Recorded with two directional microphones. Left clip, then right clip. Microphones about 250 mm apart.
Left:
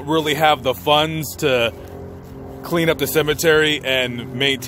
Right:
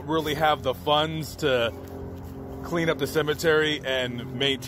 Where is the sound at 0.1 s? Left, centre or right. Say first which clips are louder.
Left 7 dB; left.